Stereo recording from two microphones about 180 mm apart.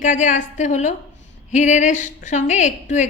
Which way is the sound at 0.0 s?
45° left (ahead or behind).